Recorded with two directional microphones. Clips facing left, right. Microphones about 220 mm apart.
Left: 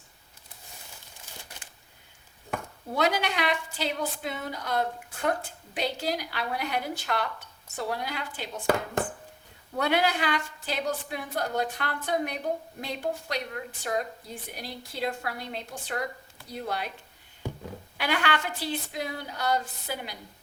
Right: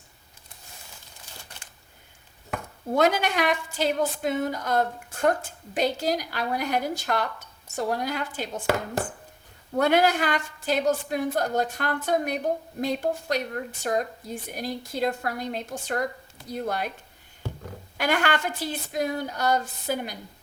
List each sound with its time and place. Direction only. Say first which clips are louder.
2.9 s a woman's voice: right 5 dB; 50° right (ahead or behind)
9.7 s a woman's voice: right 5 dB; 45° right (ahead or behind)
17.9 s a woman's voice: right 4 dB; 45° right (ahead or behind)